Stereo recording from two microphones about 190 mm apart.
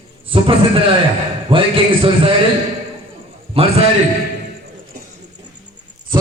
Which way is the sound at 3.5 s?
30° right (ahead or behind).